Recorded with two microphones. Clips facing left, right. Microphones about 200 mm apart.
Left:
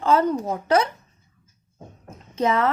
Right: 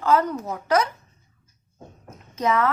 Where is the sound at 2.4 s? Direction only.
30° left (ahead or behind).